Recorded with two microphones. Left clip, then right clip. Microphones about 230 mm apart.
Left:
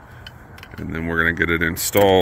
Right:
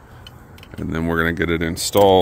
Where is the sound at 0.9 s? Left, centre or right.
Right; by 2.2 s centre.